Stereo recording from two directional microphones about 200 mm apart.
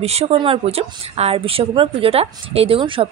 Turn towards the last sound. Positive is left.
turn(degrees=-30)  # may be behind; listen again after turning